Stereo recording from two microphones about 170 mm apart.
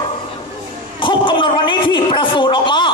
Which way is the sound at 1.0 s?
30° left (ahead or behind).